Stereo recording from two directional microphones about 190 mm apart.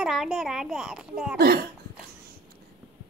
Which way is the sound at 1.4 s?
55° right (ahead or behind).